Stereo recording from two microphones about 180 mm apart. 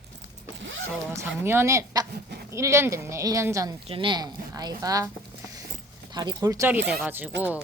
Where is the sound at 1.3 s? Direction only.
15° right (ahead or behind).